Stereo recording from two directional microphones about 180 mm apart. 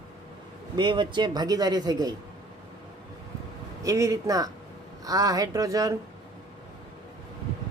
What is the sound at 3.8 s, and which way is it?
A man's voice, 15° right (ahead or behind).